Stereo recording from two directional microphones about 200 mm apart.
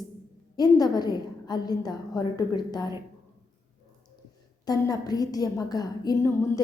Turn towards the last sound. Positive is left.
turn(degrees=15)  # may be behind; listen again after turning